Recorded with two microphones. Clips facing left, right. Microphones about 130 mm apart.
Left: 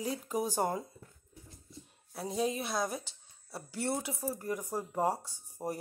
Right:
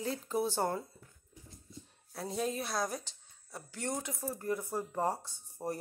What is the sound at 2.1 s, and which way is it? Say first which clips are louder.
A woman's voice: left 2 dB; 10° left (ahead or behind).